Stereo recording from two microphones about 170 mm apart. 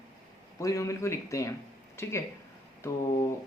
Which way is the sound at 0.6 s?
20° left (ahead or behind).